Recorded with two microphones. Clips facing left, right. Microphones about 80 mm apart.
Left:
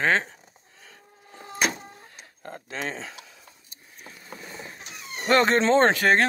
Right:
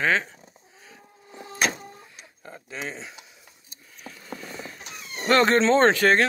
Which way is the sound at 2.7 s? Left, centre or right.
Left.